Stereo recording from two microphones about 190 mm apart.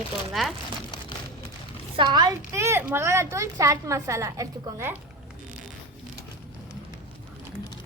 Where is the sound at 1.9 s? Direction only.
25° right (ahead or behind).